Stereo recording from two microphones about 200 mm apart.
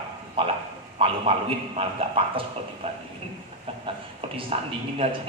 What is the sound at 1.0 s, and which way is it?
A man's voice, 30° right (ahead or behind).